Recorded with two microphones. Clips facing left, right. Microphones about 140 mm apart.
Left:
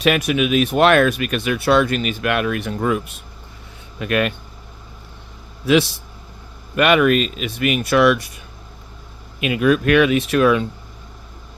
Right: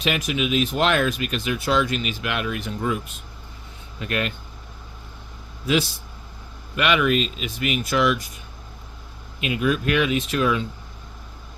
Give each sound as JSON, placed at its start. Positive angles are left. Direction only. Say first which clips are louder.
{"t": 0.0, "sound": "speech", "louder": "left 6 dB", "side_deg": 65}
{"t": 4.0, "sound": "speech", "louder": "left 7 dB", "side_deg": 65}
{"t": 6.7, "sound": "speech", "louder": "left 6 dB", "side_deg": 50}
{"t": 9.4, "sound": "speech", "louder": "left 6 dB", "side_deg": 60}